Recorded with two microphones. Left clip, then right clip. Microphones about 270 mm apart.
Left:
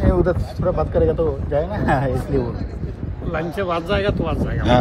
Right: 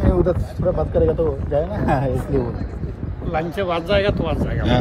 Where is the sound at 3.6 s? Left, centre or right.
Right.